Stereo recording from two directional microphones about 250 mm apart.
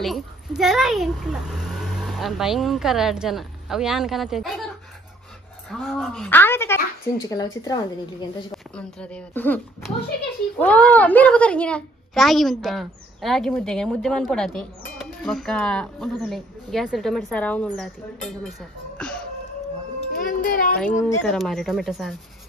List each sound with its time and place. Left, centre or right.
0.0 s a child's voice: centre
5.7 s a woman's voice: centre
8.7 s a woman's voice: centre
18.9 s music: centre
20.2 s speech: left
20.8 s a woman's voice: centre